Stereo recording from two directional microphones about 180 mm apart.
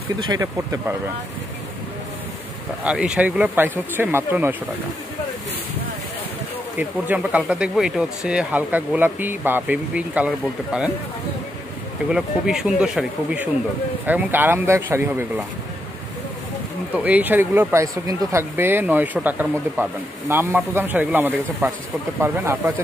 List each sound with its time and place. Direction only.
0.3 s speech: 20° right (ahead or behind)
2.8 s speech: 5° right (ahead or behind)
6.8 s speech: 5° right (ahead or behind)
12.1 s speech: 5° right (ahead or behind)
16.9 s speech: 10° right (ahead or behind)